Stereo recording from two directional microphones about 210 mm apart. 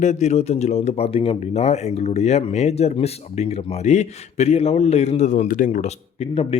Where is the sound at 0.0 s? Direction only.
35° left (ahead or behind).